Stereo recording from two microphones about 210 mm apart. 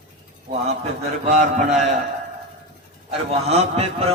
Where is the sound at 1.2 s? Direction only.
35° right (ahead or behind).